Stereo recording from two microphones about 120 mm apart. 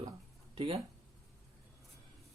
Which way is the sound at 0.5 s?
55° right (ahead or behind).